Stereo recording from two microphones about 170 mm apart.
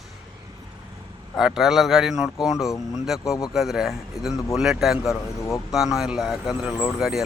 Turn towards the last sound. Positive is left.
turn(degrees=0)  # may be behind; listen again after turning